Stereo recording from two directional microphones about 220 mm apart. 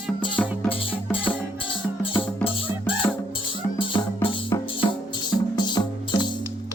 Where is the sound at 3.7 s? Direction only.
25° left (ahead or behind).